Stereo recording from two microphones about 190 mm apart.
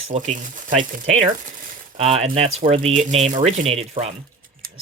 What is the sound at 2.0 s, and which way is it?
Speech, 35° right (ahead or behind).